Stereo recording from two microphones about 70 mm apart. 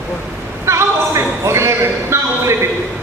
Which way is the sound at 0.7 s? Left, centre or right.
Right.